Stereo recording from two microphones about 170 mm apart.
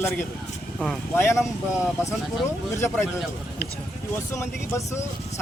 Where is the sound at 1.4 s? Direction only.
5° right (ahead or behind).